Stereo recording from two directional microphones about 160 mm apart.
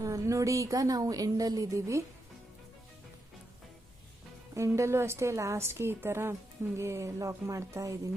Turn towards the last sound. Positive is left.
turn(degrees=-20)  # may be behind; listen again after turning